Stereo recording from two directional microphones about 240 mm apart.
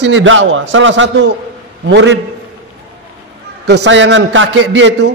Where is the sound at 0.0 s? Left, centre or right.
Right.